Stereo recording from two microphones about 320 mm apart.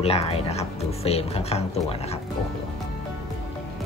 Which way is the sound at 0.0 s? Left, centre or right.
Centre.